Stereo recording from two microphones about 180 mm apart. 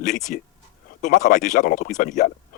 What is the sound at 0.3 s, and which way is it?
Speech, 50° left (ahead or behind).